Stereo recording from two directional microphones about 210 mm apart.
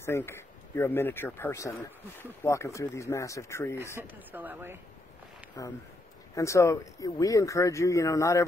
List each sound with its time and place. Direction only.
0.0 s speech: 10° left (ahead or behind)
4.1 s speech: 10° right (ahead or behind)
5.6 s speech: 15° left (ahead or behind)